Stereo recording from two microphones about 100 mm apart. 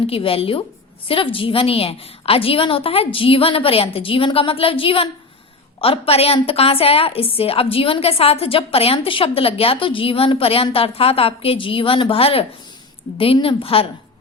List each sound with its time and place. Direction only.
0.1 s a woman's voice: 70° left (ahead or behind)
5.8 s a woman's voice: 75° left (ahead or behind)